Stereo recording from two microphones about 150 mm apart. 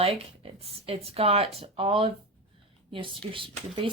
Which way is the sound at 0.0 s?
40° right (ahead or behind).